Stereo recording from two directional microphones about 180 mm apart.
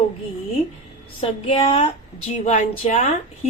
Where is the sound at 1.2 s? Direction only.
30° left (ahead or behind).